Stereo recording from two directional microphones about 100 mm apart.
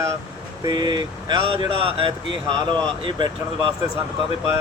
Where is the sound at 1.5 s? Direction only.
60° right (ahead or behind).